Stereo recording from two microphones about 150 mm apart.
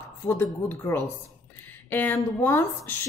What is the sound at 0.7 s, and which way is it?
A woman's voice, 20° left (ahead or behind).